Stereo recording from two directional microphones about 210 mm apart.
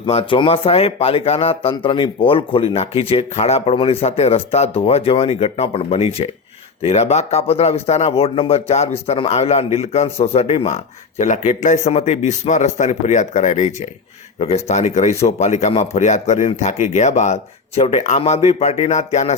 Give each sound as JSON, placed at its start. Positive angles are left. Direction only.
{"t": 0.0, "sound": "speech", "side_deg": 25}